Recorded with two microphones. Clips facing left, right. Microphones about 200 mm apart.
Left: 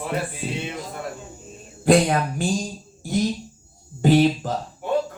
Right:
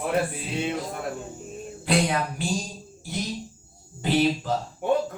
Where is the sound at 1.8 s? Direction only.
50° left (ahead or behind).